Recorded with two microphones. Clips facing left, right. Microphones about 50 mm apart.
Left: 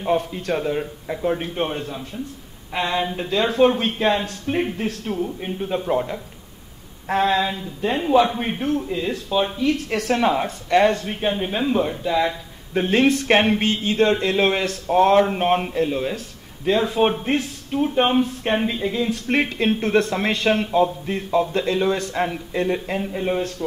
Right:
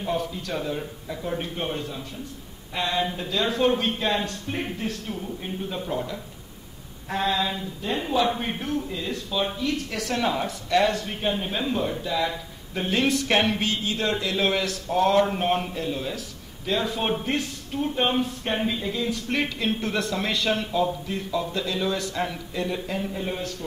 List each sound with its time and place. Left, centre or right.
0.0 s a man's voice: left
3.2 s speech: left
5.2 s a man's voice: left
7.1 s a man's voice: left
9.6 s speech: left
10.2 s speech: left
11.1 s a man's voice: centre
18.0 s a man's voice: centre
18.9 s speech: left